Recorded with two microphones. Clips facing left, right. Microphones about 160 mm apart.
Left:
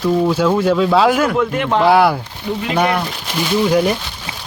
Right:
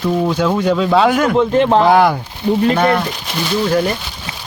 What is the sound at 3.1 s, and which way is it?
Speech, centre (ahead or behind).